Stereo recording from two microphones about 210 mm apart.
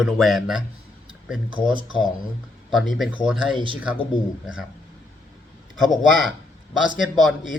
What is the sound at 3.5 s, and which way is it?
Speech, 25° right (ahead or behind).